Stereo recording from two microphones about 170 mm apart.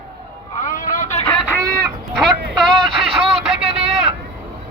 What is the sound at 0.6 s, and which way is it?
Vehicle, 50° left (ahead or behind).